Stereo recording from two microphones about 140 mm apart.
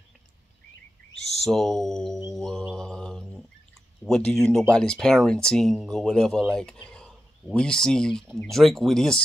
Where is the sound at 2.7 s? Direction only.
5° left (ahead or behind).